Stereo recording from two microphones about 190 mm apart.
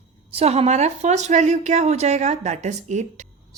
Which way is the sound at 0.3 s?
30° right (ahead or behind).